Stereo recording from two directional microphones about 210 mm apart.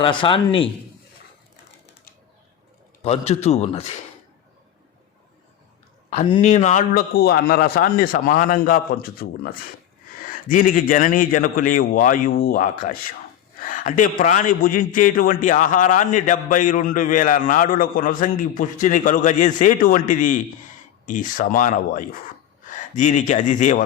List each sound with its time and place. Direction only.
0.0 s a man's voice: 25° left (ahead or behind)
3.0 s a man's voice: 30° left (ahead or behind)
6.2 s a man's voice: 30° left (ahead or behind)